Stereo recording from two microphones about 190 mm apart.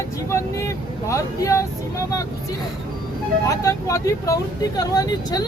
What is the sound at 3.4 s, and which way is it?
Speech, 15° left (ahead or behind).